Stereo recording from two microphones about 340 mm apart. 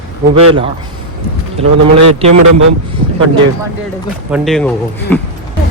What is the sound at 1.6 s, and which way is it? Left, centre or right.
Speech, centre.